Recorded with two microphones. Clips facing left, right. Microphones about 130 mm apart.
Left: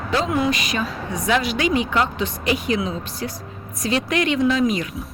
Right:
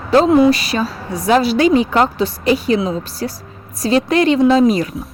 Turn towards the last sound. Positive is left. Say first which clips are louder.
# right 7 dB
turn(degrees=-35)  # may be behind; listen again after turning